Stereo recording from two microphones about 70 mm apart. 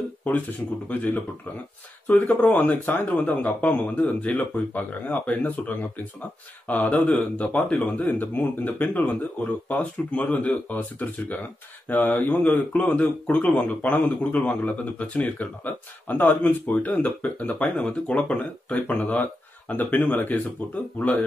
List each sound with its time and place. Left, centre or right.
0.8 s a man's voice: left
7.0 s a man's voice: centre
7.4 s a man's voice: left